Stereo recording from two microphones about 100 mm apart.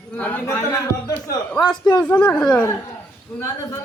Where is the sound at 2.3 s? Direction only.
10° left (ahead or behind).